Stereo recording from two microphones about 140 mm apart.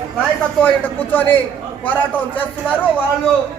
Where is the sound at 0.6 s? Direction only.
10° left (ahead or behind).